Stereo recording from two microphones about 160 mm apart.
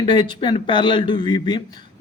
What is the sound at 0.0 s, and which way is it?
Speech, 30° left (ahead or behind).